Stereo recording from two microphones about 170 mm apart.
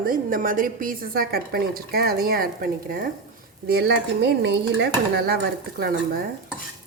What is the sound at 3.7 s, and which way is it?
Speech, 75° right (ahead or behind).